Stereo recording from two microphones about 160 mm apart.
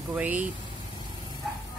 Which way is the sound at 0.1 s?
10° right (ahead or behind).